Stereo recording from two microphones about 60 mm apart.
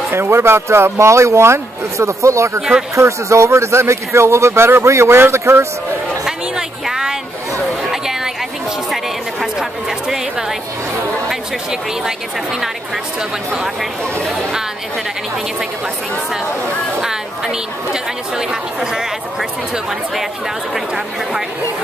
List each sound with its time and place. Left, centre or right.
0.1 s speech: right
6.2 s a sound: centre
17.0 s a woman's voice: centre
20.7 s a woman's voice: centre